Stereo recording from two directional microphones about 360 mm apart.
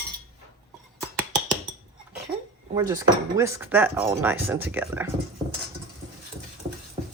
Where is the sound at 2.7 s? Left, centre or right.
Centre.